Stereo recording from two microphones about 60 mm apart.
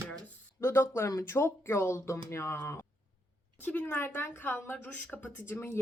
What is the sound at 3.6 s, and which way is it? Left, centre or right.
Speech, left.